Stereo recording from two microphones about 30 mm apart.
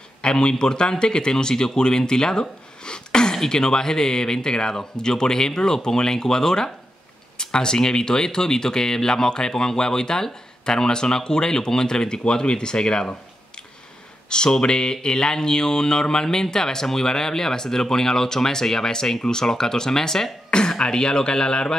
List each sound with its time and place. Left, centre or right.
0.2 s speech: left
14.3 s speech: left